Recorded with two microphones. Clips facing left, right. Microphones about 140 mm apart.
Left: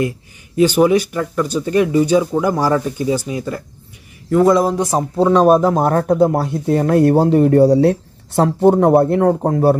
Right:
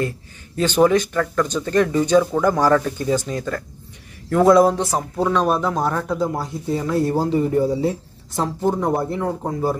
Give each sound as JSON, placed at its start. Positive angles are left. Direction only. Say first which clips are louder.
{"t": 0.6, "sound": "speech", "louder": "left 4 dB", "side_deg": 10}
{"t": 4.3, "sound": "a man's voice", "louder": "left 1 dB", "side_deg": 0}
{"t": 4.7, "sound": "speech", "louder": "left 6 dB", "side_deg": 20}
{"t": 5.3, "sound": "speech", "louder": "left 9 dB", "side_deg": 45}